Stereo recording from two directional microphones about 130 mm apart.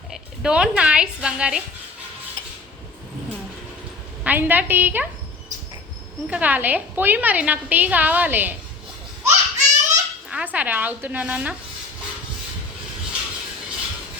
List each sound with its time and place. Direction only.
0.1 s speech: 5° right (ahead or behind)
4.2 s a woman's voice: 15° right (ahead or behind)
6.2 s a woman's voice: 10° right (ahead or behind)
9.6 s laughter: 65° right (ahead or behind)
10.2 s speech: 10° right (ahead or behind)